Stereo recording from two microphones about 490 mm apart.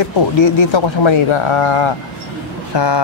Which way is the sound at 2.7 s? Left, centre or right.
Left.